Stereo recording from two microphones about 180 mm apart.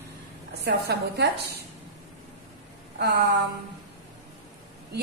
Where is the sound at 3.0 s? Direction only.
60° right (ahead or behind).